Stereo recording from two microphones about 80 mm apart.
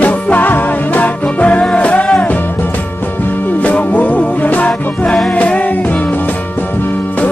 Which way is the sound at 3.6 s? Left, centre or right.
Centre.